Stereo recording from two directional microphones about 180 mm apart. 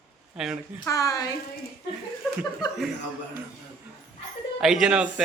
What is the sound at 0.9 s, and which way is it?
Speech, 20° left (ahead or behind).